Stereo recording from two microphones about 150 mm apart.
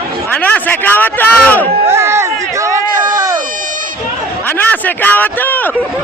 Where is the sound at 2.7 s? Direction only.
20° right (ahead or behind).